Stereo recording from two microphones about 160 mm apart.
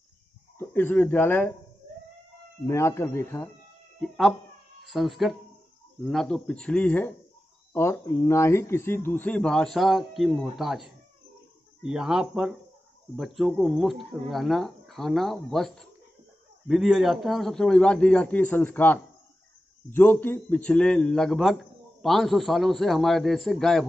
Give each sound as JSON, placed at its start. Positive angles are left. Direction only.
{"t": 0.6, "sound": "a man's voice", "side_deg": 15}
{"t": 2.6, "sound": "a man's voice", "side_deg": 15}
{"t": 4.8, "sound": "a man's voice", "side_deg": 0}